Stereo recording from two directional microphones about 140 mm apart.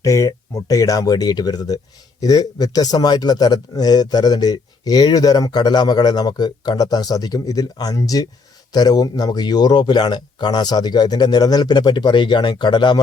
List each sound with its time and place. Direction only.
0.0 s a man's voice: 20° left (ahead or behind)